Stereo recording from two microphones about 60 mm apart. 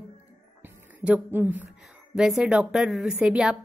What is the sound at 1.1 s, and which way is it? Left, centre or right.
Speech, right.